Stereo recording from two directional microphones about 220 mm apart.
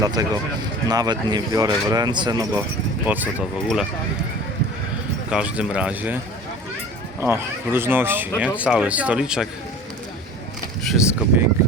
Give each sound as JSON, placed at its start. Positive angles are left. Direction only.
{"t": 0.0, "sound": "speech", "side_deg": -15}
{"t": 3.1, "sound": "speech", "side_deg": -5}
{"t": 5.3, "sound": "speech", "side_deg": -5}
{"t": 7.2, "sound": "speech", "side_deg": -10}
{"t": 10.8, "sound": "speech", "side_deg": -5}